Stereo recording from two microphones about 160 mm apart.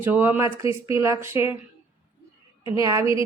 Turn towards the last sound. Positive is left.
turn(degrees=-20)  # may be behind; listen again after turning